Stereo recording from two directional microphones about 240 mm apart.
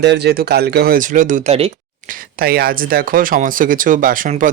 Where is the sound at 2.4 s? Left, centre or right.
Right.